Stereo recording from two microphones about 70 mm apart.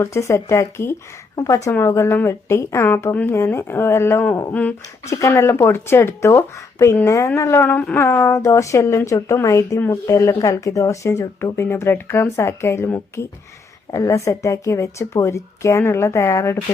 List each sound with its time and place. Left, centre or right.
0.0 s a woman's voice: left
1.4 s a woman's voice: left
1.8 s speech: left
7.0 s a woman's voice: left
7.6 s a woman's voice: left